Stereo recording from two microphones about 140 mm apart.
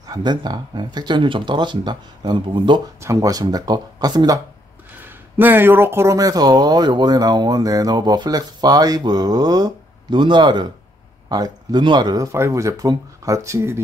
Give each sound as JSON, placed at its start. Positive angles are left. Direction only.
{"t": 0.0, "sound": "speech", "side_deg": -30}
{"t": 3.0, "sound": "speech", "side_deg": -25}
{"t": 5.0, "sound": "speech", "side_deg": -15}